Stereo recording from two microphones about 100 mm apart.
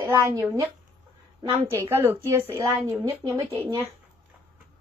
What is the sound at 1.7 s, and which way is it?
A woman's voice, 25° right (ahead or behind).